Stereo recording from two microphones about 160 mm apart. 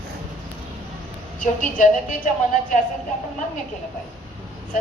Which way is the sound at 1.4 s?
55° left (ahead or behind).